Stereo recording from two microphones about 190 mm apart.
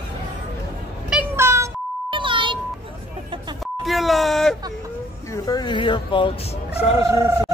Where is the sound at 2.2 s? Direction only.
25° right (ahead or behind).